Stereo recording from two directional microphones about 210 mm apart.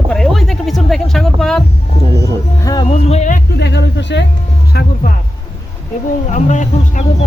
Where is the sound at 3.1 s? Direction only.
35° left (ahead or behind).